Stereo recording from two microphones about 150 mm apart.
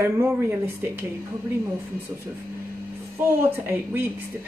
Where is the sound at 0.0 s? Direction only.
15° right (ahead or behind).